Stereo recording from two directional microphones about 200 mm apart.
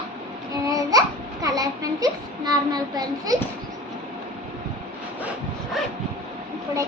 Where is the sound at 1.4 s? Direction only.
20° right (ahead or behind).